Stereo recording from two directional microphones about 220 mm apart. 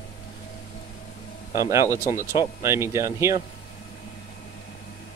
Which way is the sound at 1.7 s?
15° right (ahead or behind).